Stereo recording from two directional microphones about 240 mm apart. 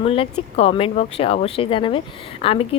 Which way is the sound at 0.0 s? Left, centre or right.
Left.